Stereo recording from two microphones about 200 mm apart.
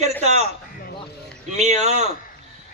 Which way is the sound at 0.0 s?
35° right (ahead or behind).